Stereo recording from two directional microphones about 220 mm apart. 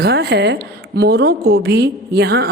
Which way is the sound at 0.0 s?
50° right (ahead or behind).